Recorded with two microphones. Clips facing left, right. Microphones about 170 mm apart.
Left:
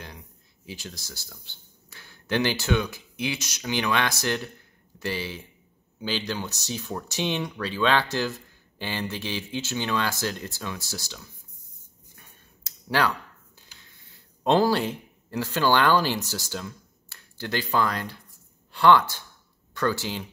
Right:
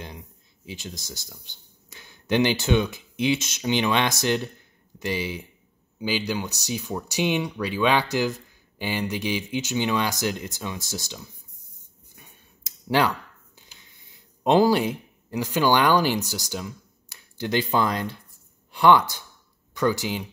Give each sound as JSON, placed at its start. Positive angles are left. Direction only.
{"t": 0.7, "sound": "speech", "side_deg": -20}
{"t": 12.2, "sound": "a sound", "side_deg": -15}
{"t": 13.8, "sound": "speech", "side_deg": -15}